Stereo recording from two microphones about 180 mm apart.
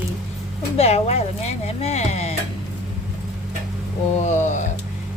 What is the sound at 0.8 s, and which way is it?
Speech, 35° left (ahead or behind).